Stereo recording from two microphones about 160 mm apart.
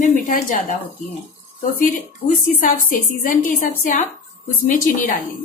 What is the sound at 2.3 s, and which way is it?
A woman's voice, 60° left (ahead or behind).